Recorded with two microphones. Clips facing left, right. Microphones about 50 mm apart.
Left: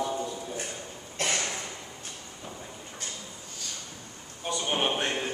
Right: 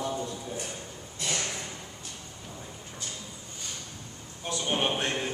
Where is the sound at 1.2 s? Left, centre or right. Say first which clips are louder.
Left 3 dB; left.